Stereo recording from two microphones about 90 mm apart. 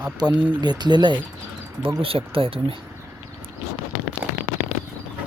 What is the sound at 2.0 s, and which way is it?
Speech, 90° right.